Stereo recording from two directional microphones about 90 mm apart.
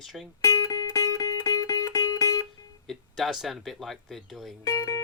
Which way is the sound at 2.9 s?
Centre (ahead or behind).